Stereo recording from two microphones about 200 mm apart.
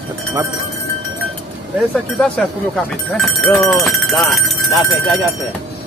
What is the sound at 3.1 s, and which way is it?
Speech, centre (ahead or behind).